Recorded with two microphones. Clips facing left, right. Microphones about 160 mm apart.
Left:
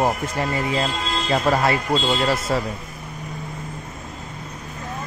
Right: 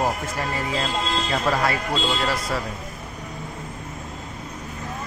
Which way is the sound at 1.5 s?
30° left (ahead or behind).